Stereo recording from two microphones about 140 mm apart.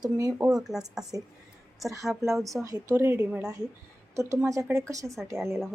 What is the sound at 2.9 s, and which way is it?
A woman's voice, 15° right (ahead or behind).